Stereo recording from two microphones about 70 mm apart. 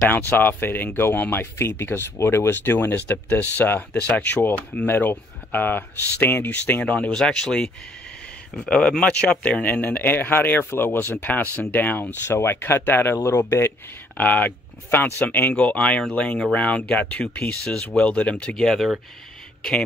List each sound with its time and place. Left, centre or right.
0.0 s speech: left
14.1 s speech: left; by 18.9 s centre